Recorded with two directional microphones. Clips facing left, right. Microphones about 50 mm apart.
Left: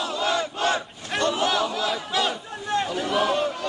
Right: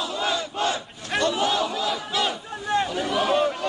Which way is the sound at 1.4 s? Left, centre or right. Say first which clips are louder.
Even; left.